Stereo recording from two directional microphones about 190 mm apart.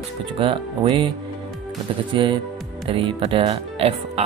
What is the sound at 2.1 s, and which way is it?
Speech, 25° right (ahead or behind).